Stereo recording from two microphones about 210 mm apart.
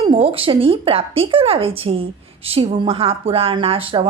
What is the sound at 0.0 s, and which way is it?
A woman's voice, 25° right (ahead or behind).